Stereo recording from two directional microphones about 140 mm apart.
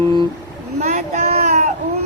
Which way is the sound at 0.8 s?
55° right (ahead or behind).